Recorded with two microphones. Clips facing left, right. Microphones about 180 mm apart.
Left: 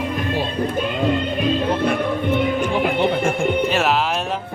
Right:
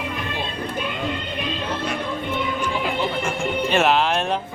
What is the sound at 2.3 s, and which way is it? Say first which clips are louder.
Music: left 6 dB; 55° left (ahead or behind).